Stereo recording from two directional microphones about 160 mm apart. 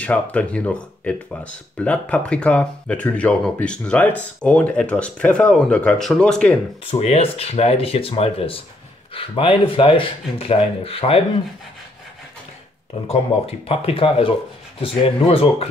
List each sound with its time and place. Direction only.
0.0 s speech: 10° left (ahead or behind)
6.8 s speech: 35° left (ahead or behind)
13.1 s speech: 40° left (ahead or behind)